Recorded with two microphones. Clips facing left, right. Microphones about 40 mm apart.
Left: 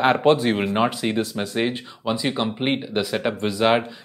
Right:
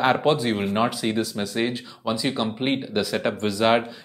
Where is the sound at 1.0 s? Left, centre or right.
Centre.